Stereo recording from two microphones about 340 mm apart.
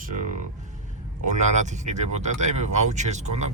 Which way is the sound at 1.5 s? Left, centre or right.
Right.